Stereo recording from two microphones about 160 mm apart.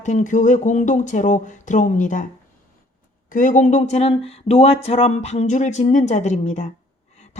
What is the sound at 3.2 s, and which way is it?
Speech, 55° left (ahead or behind).